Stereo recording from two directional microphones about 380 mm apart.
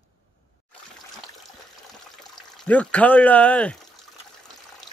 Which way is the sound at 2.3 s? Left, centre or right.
Centre.